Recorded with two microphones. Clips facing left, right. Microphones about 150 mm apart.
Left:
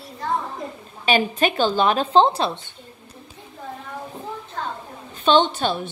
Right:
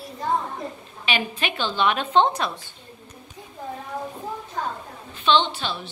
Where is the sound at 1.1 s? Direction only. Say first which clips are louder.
Left 7 dB; 40° left (ahead or behind).